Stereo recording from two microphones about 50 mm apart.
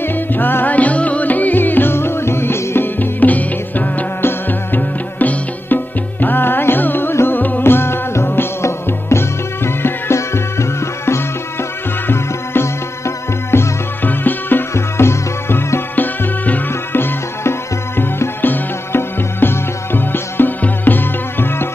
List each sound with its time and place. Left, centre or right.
0.0 s music: left
0.7 s music: left
3.0 s music: left
4.2 s music: left
7.6 s music: left
12.1 s music: left
14.0 s music: left
14.7 s music: left
16.0 s music: left